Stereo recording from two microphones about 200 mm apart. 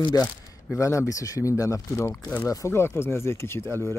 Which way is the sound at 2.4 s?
15° left (ahead or behind).